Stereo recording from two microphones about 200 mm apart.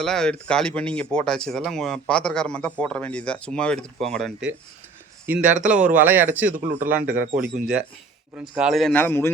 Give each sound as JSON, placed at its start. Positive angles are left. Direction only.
{"t": 0.0, "sound": "a man's voice", "side_deg": 5}
{"t": 5.5, "sound": "speech", "side_deg": -40}
{"t": 5.8, "sound": "a man's voice", "side_deg": -10}